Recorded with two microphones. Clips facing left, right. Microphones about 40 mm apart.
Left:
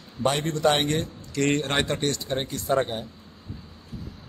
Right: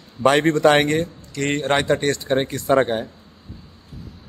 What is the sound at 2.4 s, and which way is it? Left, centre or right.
Speech, right.